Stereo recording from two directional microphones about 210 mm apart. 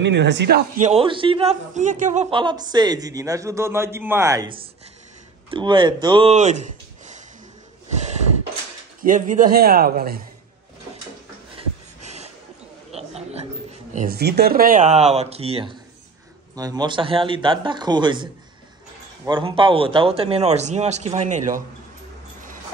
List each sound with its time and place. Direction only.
0.0 s a man's voice: 55° right (ahead or behind)
0.7 s speech: 30° right (ahead or behind)
2.3 s a man's voice: 20° right (ahead or behind)
9.0 s a man's voice: 40° right (ahead or behind)
11.5 s a sound: 30° right (ahead or behind)
13.9 s speech: 45° right (ahead or behind)